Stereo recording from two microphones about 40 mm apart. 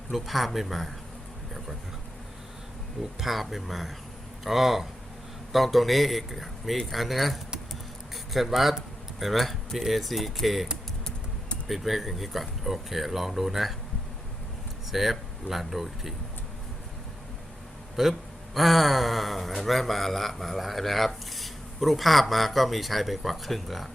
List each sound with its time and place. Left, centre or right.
0.1 s a man's voice: centre
3.2 s a man's voice: centre
7.7 s a sound: centre
9.1 s a man's voice: centre
11.7 s a man's voice: centre
14.8 s speech: centre
18.1 s a man's voice: centre